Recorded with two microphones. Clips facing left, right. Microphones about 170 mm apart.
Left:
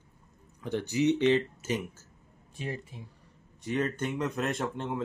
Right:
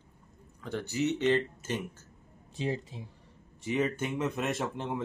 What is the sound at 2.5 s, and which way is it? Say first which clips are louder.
Speech: right 4 dB; 25° right (ahead or behind).